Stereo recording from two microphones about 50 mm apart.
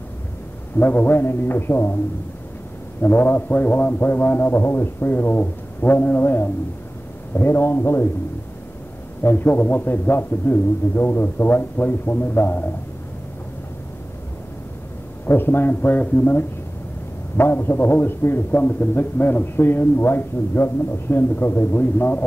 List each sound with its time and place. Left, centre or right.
0.7 s a man's voice: left
3.0 s a man's voice: left
9.2 s a man's voice: left
15.2 s a man's voice: left